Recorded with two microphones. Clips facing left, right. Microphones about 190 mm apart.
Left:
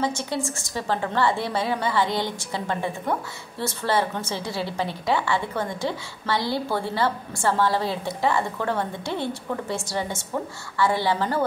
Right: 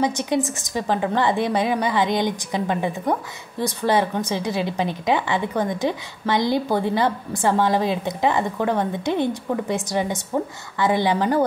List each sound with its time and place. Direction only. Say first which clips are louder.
0.0 s a woman's voice: right 5 dB; 15° right (ahead or behind)